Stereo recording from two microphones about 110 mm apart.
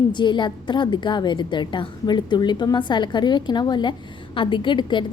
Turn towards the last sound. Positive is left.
turn(degrees=45)  # may be behind; listen again after turning